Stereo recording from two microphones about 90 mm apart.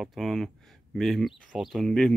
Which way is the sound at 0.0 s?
Centre (ahead or behind).